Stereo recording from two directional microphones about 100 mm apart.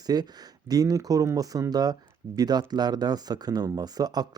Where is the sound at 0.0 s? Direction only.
40° right (ahead or behind).